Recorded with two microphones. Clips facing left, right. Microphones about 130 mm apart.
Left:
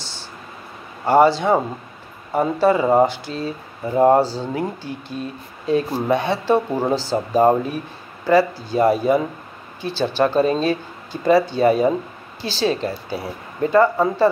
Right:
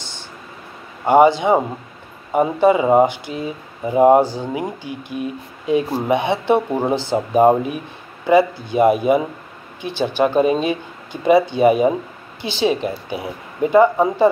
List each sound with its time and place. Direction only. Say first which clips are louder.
1.0 s speech: right 2 dB; 15° right (ahead or behind)